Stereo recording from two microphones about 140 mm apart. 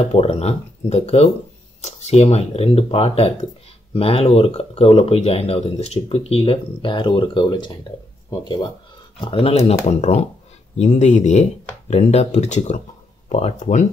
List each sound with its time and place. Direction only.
0.0 s speech: 45° left (ahead or behind); by 8.6 s 30° left (ahead or behind)
9.2 s speech: 40° left (ahead or behind)